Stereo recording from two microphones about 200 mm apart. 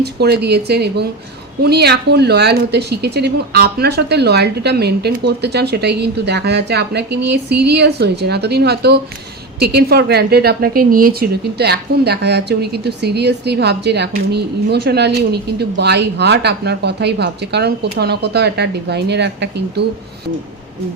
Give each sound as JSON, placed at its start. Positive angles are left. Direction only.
{"t": 0.0, "sound": "a woman's voice", "side_deg": -55}